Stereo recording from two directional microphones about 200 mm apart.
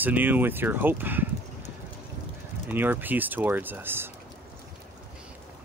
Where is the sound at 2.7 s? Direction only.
10° right (ahead or behind).